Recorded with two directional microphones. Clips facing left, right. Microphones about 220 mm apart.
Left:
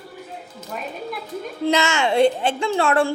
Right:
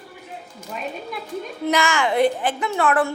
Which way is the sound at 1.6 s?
25° left (ahead or behind).